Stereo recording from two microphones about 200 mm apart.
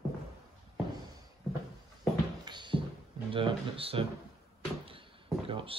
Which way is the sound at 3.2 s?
25° right (ahead or behind).